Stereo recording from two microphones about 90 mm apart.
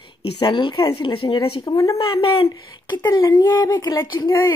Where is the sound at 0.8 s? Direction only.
75° left (ahead or behind).